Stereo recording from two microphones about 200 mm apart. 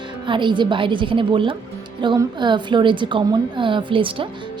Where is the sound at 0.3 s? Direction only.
25° right (ahead or behind).